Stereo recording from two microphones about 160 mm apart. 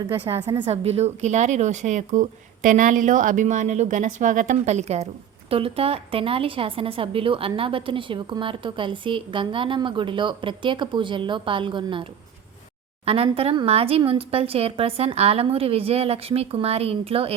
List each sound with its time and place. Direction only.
0.4 s a woman's voice: 35° right (ahead or behind)
13.1 s a woman's voice: 35° right (ahead or behind)